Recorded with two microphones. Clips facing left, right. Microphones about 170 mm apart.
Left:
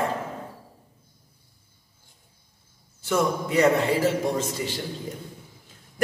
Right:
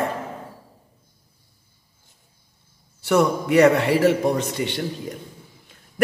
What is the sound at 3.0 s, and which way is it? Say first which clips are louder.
A man's voice: right 5 dB; 70° right (ahead or behind).